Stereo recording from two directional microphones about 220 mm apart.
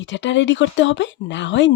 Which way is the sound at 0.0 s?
55° left (ahead or behind).